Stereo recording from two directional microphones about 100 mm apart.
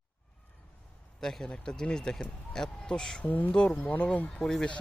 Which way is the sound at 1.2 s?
5° left (ahead or behind).